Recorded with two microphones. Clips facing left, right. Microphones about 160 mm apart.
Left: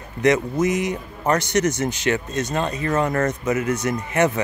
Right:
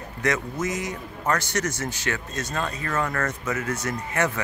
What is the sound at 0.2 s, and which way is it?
Speech, 20° left (ahead or behind).